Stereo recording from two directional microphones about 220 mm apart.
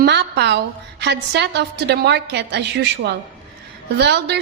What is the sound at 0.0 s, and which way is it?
A woman's voice, 50° right (ahead or behind).